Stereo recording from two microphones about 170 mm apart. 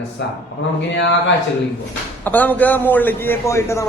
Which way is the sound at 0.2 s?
90° left.